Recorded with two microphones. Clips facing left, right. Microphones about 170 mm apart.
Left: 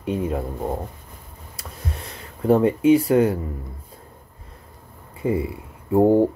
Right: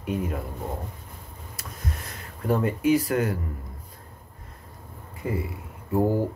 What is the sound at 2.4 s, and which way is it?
Speech, 25° left (ahead or behind).